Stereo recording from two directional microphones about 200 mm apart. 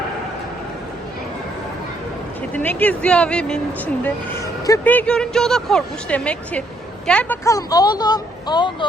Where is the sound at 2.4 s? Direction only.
10° left (ahead or behind).